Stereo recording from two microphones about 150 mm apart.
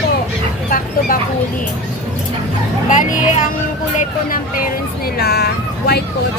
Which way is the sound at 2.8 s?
55° left (ahead or behind).